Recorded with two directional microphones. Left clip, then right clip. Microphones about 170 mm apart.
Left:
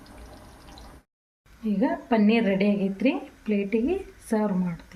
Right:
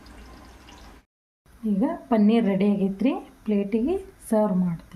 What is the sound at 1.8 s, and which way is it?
A woman's voice, 75° right (ahead or behind).